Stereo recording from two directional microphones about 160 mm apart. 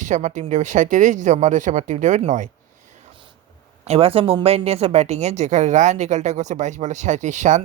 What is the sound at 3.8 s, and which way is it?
Speech, 40° right (ahead or behind).